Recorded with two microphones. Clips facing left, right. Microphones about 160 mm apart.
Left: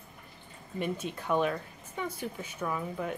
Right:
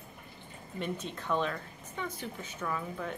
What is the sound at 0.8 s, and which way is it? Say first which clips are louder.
Speech: left 3 dB; 10° left (ahead or behind).